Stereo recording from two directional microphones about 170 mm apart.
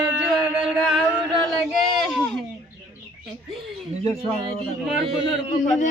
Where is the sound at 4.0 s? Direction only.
35° right (ahead or behind).